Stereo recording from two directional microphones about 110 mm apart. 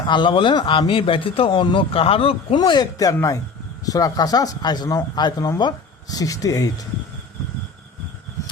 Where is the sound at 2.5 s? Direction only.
45° left (ahead or behind).